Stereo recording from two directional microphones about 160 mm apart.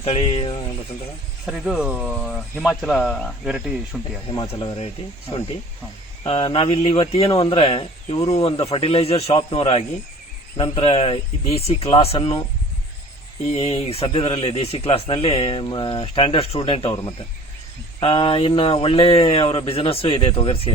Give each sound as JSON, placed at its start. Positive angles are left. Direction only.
{"t": 0.0, "sound": "speech", "side_deg": 35}
{"t": 1.5, "sound": "speech", "side_deg": -5}
{"t": 4.3, "sound": "speech", "side_deg": 30}
{"t": 6.2, "sound": "speech", "side_deg": 35}
{"t": 13.5, "sound": "speech", "side_deg": 40}